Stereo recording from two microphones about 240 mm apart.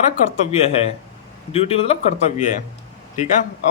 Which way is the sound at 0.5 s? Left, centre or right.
Left.